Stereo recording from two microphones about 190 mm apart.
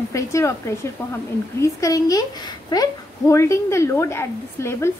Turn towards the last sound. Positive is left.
turn(degrees=15)  # may be behind; listen again after turning